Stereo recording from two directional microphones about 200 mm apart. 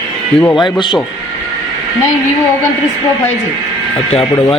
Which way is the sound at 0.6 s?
20° left (ahead or behind).